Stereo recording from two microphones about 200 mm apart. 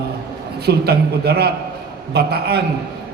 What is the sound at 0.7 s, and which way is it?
A man's voice, 50° right (ahead or behind).